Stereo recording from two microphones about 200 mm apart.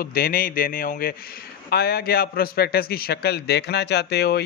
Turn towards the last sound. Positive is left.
turn(degrees=55)  # may be behind; listen again after turning